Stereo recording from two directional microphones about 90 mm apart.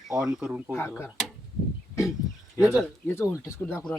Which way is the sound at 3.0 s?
30° left (ahead or behind).